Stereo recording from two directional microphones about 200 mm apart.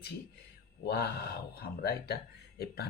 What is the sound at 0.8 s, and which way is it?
Speech, 55° left (ahead or behind).